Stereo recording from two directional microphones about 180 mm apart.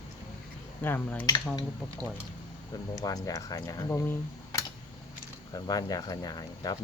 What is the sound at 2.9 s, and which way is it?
Speech, 20° left (ahead or behind).